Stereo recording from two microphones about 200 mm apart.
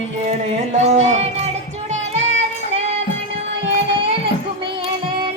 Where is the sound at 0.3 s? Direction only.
35° right (ahead or behind).